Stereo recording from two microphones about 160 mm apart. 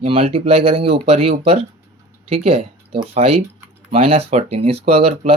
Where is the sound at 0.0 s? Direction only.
35° right (ahead or behind).